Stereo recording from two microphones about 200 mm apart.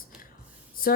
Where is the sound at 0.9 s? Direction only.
45° left (ahead or behind).